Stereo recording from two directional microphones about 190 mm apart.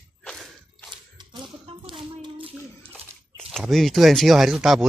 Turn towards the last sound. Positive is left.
turn(degrees=0)  # may be behind; listen again after turning